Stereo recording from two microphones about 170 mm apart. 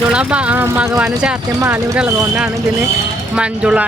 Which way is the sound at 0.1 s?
5° right (ahead or behind).